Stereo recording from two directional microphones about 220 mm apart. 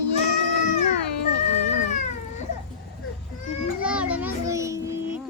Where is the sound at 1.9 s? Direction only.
35° left (ahead or behind).